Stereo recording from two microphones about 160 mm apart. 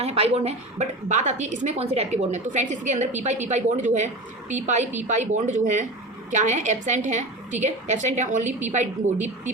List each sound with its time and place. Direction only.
0.0 s a woman's voice: 40° right (ahead or behind)